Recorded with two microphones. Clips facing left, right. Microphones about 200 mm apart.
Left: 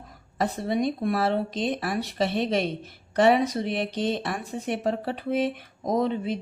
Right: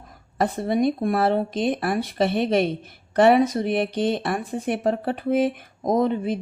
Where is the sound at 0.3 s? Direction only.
50° right (ahead or behind).